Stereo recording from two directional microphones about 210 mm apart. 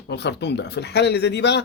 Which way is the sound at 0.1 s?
55° left (ahead or behind).